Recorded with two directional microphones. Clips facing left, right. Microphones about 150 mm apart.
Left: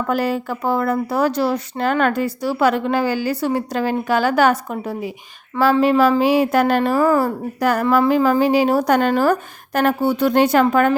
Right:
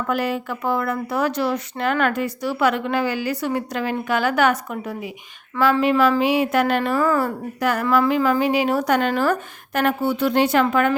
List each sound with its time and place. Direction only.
0.1 s a woman's voice: 35° left (ahead or behind)